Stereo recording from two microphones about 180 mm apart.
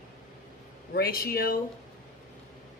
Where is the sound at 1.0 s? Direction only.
55° left (ahead or behind).